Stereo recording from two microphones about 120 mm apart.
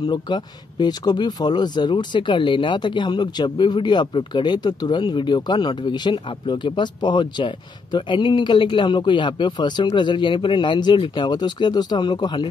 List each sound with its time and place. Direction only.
0.0 s speech: 35° left (ahead or behind)